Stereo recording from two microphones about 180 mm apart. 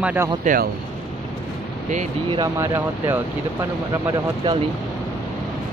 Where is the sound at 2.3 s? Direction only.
15° right (ahead or behind).